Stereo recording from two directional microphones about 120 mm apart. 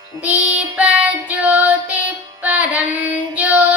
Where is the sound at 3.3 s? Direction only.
10° right (ahead or behind).